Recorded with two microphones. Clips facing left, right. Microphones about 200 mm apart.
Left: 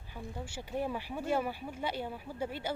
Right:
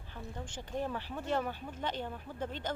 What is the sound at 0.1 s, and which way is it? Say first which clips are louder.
Speech: left 2 dB; 10° left (ahead or behind).